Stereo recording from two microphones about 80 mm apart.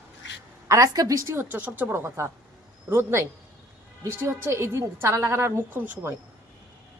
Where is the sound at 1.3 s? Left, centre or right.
Right.